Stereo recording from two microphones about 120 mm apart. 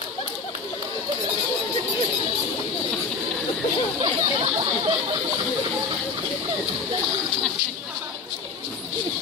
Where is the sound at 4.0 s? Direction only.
50° right (ahead or behind).